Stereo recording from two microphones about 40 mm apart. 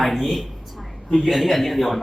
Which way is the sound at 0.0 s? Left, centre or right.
Centre.